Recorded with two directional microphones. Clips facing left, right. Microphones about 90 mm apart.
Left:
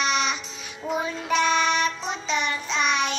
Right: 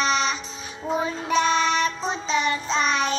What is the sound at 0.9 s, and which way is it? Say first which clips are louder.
Child singing: right 1 dB; 30° right (ahead or behind).